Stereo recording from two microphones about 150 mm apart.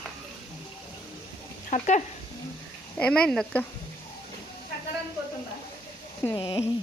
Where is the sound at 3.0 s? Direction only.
5° left (ahead or behind).